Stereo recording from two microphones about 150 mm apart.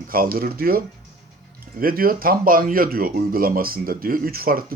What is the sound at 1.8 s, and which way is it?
Speech, 75° right (ahead or behind).